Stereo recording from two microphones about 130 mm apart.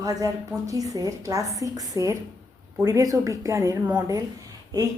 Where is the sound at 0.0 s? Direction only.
30° right (ahead or behind).